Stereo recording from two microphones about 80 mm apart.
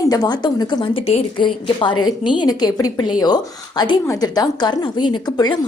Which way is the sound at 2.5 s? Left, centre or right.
Left.